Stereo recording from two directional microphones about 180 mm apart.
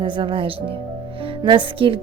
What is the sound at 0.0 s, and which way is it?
A woman's voice, 25° right (ahead or behind).